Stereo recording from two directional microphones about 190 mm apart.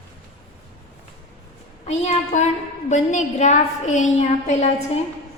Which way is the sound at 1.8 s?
35° left (ahead or behind).